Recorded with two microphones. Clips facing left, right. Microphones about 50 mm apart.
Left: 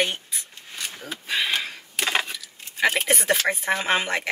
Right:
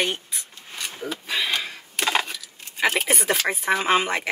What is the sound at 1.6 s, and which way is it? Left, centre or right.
Speech, centre.